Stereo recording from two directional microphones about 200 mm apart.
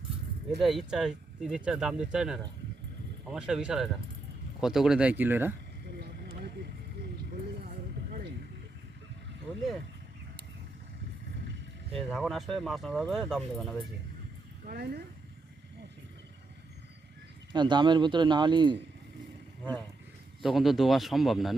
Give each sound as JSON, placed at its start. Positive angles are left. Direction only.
{"t": 0.6, "sound": "speech", "side_deg": 0}
{"t": 6.0, "sound": "a sound", "side_deg": -55}
{"t": 11.9, "sound": "speech", "side_deg": 0}
{"t": 14.7, "sound": "speech", "side_deg": -50}
{"t": 17.5, "sound": "speech", "side_deg": -25}
{"t": 20.4, "sound": "speech", "side_deg": 0}